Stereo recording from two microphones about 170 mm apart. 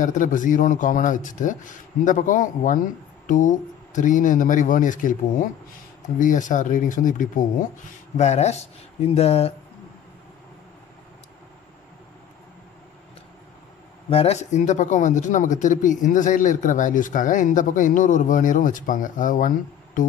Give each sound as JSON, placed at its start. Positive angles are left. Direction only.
{"t": 0.0, "sound": "speech", "side_deg": 50}
{"t": 14.1, "sound": "speech", "side_deg": 40}